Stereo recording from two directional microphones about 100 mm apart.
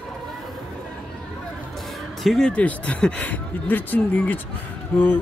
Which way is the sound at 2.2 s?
5° left (ahead or behind).